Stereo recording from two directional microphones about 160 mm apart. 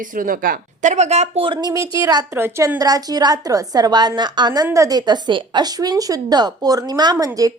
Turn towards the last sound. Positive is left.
turn(degrees=-20)  # may be behind; listen again after turning